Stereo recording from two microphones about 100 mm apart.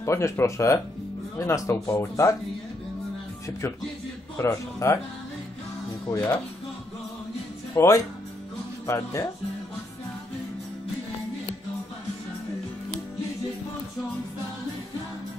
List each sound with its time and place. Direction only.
0.0 s speech: 30° left (ahead or behind)
4.4 s speech: 30° left (ahead or behind)
6.1 s speech: 20° left (ahead or behind)
7.7 s speech: 30° left (ahead or behind)